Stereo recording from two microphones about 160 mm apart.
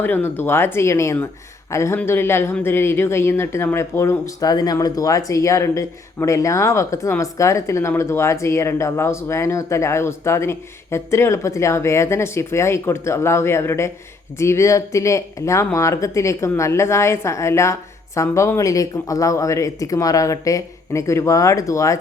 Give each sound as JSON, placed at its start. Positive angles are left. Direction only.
{"t": 0.0, "sound": "speech", "side_deg": 10}